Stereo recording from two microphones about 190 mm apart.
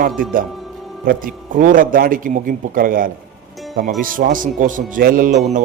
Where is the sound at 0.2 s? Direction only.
45° right (ahead or behind).